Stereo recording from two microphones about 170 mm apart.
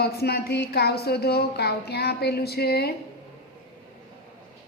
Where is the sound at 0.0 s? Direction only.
70° left (ahead or behind).